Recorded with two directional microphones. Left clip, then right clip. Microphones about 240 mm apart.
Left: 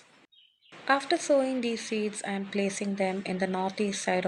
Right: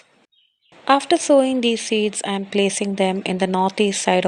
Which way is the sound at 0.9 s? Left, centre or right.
Right.